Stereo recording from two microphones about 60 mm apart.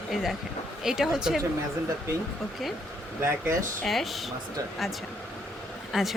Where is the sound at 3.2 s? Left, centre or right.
Right.